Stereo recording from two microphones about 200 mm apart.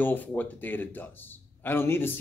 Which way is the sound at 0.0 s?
10° left (ahead or behind).